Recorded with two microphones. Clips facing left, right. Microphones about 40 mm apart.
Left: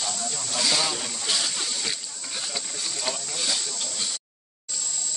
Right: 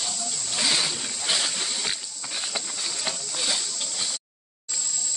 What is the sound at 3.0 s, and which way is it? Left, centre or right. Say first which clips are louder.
Snake: left 1 dB; centre.